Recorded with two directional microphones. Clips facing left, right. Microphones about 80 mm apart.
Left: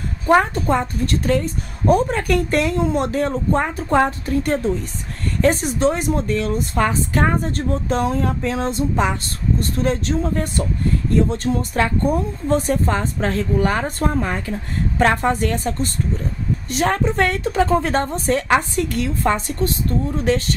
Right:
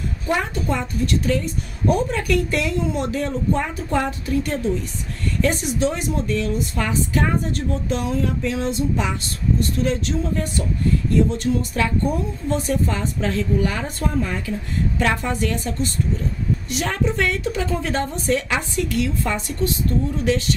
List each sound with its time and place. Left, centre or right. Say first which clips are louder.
0.3 s a woman's voice: left 7 dB; left